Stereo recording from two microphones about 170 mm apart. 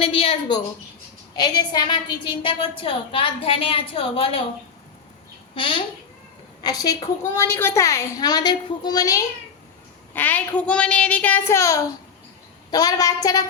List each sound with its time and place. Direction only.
0.0 s a woman's voice: 35° left (ahead or behind)
5.5 s a woman's voice: 30° left (ahead or behind)
10.2 s a woman's voice: 10° left (ahead or behind)